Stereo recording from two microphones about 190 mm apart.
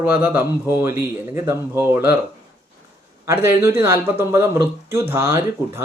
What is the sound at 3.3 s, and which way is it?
Speech, 15° right (ahead or behind).